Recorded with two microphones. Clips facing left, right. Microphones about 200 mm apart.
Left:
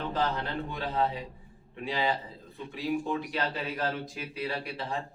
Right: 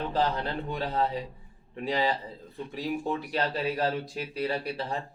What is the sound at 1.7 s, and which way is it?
Speech, 40° right (ahead or behind).